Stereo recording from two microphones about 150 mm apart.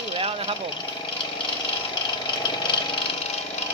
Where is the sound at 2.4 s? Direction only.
35° left (ahead or behind).